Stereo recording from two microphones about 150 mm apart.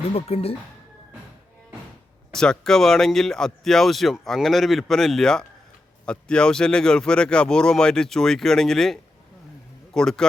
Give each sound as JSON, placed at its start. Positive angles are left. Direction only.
{"t": 0.1, "sound": "speech", "side_deg": 40}
{"t": 2.3, "sound": "speech", "side_deg": 5}